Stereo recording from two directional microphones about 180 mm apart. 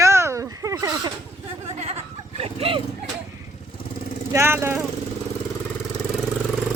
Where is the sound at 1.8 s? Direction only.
35° right (ahead or behind).